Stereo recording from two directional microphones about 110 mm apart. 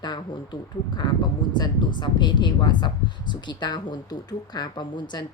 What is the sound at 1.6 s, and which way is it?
Speech, 40° left (ahead or behind).